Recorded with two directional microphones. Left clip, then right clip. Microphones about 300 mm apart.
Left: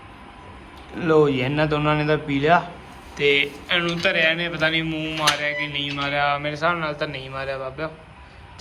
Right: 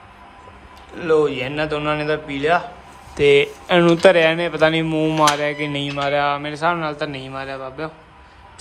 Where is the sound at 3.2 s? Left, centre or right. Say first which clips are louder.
Right 5 dB; centre.